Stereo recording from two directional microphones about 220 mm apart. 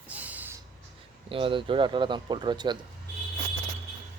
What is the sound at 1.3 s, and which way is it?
Speech, 25° right (ahead or behind).